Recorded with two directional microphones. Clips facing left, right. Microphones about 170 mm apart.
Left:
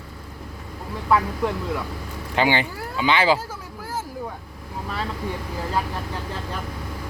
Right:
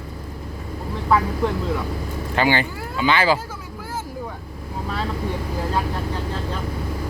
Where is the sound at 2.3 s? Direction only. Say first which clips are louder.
Right 1 dB; 15° left (ahead or behind).